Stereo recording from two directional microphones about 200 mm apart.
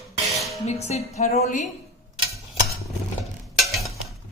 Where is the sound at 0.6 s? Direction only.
30° left (ahead or behind).